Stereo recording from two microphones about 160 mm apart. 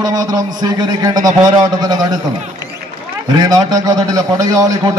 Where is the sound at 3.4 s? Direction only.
25° right (ahead or behind).